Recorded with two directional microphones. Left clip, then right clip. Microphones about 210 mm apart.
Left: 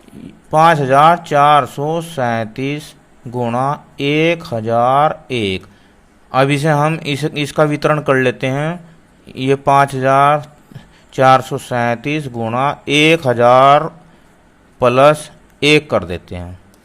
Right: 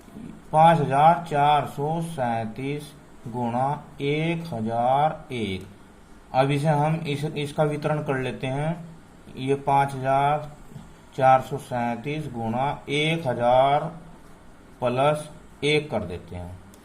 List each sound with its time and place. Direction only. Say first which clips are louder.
0.5 s a man's voice: left 8 dB; 55° left (ahead or behind)